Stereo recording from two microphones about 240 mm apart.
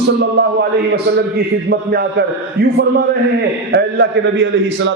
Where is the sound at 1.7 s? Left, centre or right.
Right.